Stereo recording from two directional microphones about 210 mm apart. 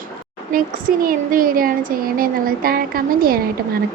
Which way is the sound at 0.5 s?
40° right (ahead or behind).